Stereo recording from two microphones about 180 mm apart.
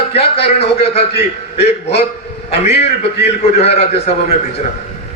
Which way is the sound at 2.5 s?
35° left (ahead or behind).